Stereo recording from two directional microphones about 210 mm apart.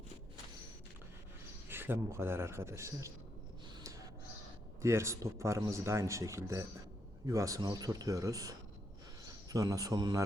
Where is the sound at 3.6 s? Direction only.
20° right (ahead or behind).